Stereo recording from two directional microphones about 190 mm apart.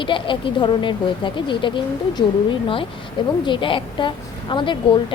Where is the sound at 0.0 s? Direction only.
25° left (ahead or behind).